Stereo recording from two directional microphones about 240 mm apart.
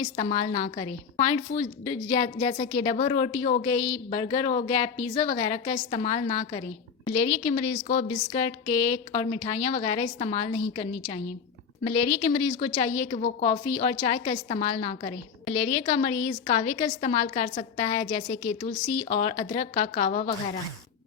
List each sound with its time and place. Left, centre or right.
0.0 s a woman's voice: left